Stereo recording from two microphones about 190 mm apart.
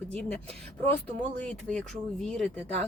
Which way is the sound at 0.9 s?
10° left (ahead or behind).